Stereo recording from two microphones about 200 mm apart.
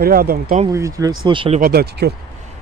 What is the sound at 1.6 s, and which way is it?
Speech, 50° right (ahead or behind).